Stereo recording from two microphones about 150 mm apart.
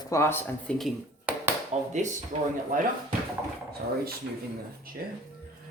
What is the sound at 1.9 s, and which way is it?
Speech, 55° right (ahead or behind).